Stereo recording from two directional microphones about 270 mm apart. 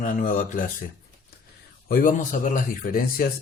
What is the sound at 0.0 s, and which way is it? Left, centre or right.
Speech, left.